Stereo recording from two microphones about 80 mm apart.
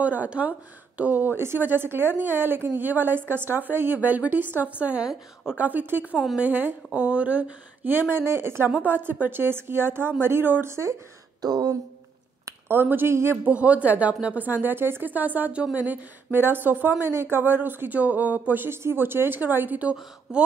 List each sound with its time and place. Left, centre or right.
0.0 s a woman's voice: centre
6.1 s speech: centre
6.4 s a woman's voice: right
11.4 s speech: right
12.4 s a sound: right
12.8 s speech: right
13.4 s a woman's voice: centre